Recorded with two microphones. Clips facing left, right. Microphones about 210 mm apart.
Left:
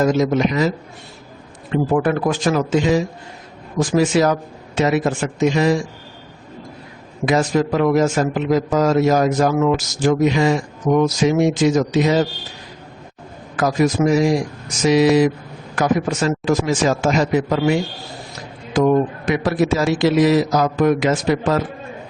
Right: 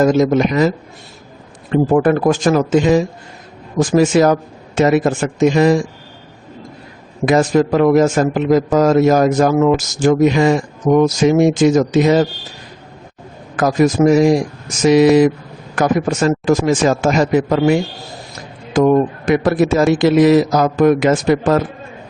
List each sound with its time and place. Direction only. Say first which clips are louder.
0.0 s a man's voice: right 4 dB; 50° right (ahead or behind)
1.7 s a man's voice: right 5 dB; 45° right (ahead or behind)
7.3 s a man's voice: right 4 dB; 50° right (ahead or behind)
13.6 s a man's voice: right 4 dB; 50° right (ahead or behind)